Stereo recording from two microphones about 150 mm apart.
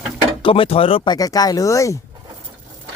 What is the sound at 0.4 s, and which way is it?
Speech, 35° left (ahead or behind).